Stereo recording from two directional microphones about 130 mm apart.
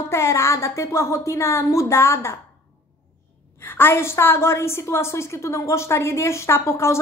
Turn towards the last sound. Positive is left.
turn(degrees=20)  # may be behind; listen again after turning